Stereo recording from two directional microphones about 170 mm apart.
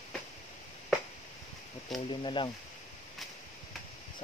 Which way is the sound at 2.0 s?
30° left (ahead or behind).